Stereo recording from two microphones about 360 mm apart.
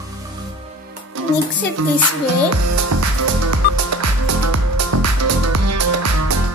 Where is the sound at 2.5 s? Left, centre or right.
Right.